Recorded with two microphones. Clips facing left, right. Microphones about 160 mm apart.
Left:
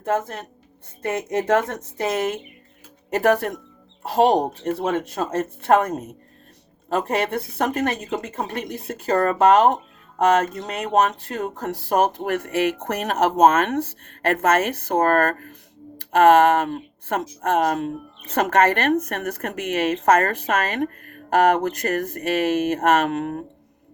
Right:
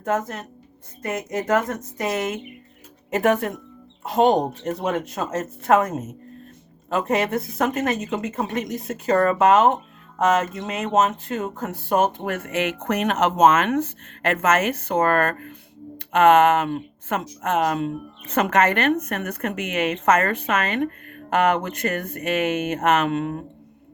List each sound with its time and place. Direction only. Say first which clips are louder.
0.0 s speech: left 1 dB; 30° left (ahead or behind)
10.5 s speech: even; 35° left (ahead or behind)